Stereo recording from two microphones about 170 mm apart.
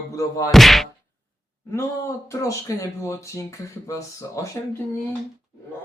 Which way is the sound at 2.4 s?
20° left (ahead or behind).